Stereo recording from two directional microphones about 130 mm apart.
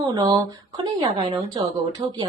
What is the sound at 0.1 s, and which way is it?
A woman's voice, 35° right (ahead or behind).